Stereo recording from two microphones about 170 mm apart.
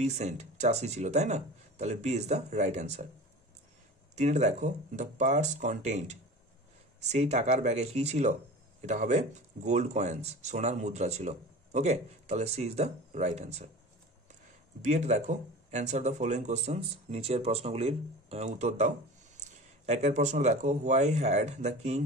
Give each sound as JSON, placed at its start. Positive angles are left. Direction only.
{"t": 0.0, "sound": "speech", "side_deg": -40}
{"t": 4.1, "sound": "speech", "side_deg": -40}
{"t": 14.8, "sound": "speech", "side_deg": -40}